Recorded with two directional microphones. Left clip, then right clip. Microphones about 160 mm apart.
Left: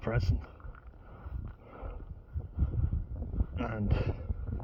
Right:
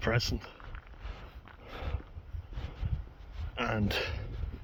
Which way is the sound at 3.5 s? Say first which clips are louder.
Right 6 dB; 25° right (ahead or behind).